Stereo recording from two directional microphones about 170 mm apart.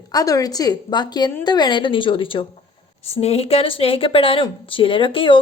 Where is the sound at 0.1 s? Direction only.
20° left (ahead or behind).